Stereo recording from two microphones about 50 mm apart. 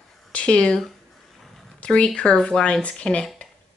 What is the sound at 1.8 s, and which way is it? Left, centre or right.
A woman's voice, centre.